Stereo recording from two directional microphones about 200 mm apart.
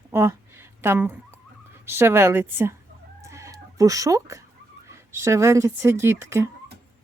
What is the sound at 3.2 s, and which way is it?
Chicken, 15° right (ahead or behind).